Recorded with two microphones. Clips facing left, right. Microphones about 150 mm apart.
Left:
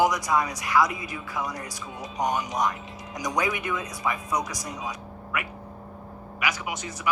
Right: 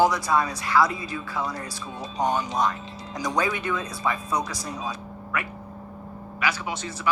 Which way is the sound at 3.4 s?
15° left (ahead or behind).